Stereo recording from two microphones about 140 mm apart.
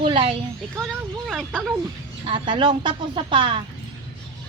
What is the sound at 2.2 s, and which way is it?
Speech, 35° right (ahead or behind).